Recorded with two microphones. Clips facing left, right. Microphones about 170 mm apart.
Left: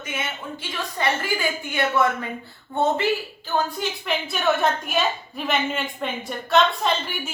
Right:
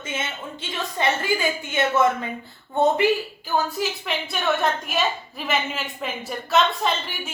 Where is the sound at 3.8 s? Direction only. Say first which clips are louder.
Even; centre (ahead or behind).